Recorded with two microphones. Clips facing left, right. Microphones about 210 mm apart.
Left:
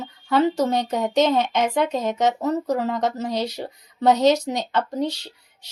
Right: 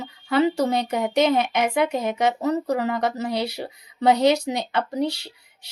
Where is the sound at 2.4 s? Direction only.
70° right (ahead or behind).